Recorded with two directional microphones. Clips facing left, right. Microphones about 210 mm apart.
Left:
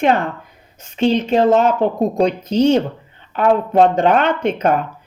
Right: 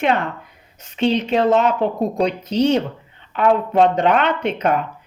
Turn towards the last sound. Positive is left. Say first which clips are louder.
# left 3 dB
turn(degrees=45)  # may be behind; listen again after turning